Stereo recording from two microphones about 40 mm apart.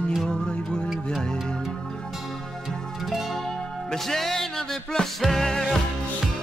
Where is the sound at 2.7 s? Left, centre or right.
Centre.